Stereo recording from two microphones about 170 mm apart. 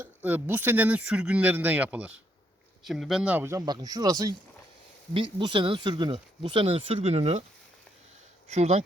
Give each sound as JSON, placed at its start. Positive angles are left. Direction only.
{"t": 0.0, "sound": "speech", "side_deg": -10}
{"t": 8.4, "sound": "speech", "side_deg": -40}